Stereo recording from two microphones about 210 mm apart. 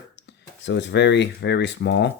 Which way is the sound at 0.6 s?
60° left (ahead or behind).